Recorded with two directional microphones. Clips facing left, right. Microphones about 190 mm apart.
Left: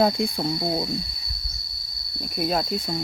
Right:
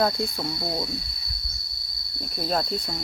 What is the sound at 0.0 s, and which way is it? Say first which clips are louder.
Speech: left 3 dB; 15° left (ahead or behind).